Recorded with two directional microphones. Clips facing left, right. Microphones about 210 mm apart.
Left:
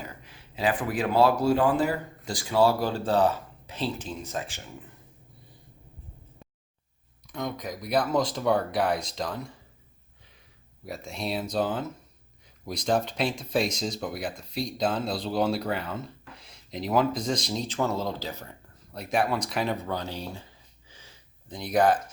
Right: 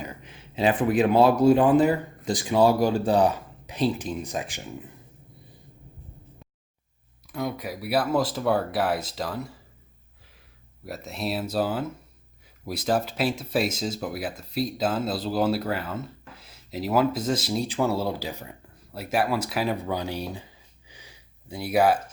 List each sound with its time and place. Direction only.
0.0 s speech: 20° right (ahead or behind)
7.3 s speech: 5° right (ahead or behind)
10.8 s speech: centre (ahead or behind)
20.8 s a sound: 15° right (ahead or behind)